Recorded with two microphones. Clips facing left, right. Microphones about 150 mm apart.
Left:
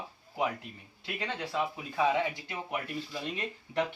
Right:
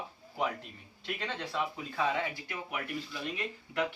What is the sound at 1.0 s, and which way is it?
Speech, 10° left (ahead or behind).